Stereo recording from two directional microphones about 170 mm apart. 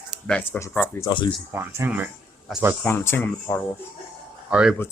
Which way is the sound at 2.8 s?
10° left (ahead or behind).